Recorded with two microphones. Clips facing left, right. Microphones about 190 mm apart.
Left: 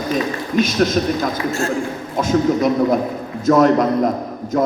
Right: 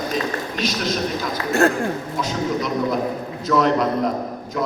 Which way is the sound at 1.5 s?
60° right (ahead or behind).